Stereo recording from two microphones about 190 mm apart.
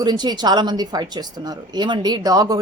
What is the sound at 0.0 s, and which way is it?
Speech, 20° right (ahead or behind).